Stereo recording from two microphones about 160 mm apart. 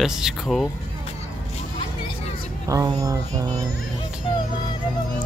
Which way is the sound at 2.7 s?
20° right (ahead or behind).